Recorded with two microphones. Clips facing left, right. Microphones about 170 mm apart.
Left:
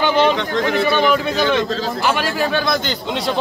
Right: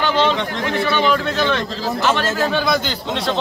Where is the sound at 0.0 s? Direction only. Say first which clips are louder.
Left 2 dB; 15° left (ahead or behind).